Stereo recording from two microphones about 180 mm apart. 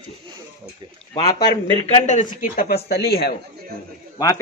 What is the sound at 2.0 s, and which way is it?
Speech, 40° left (ahead or behind).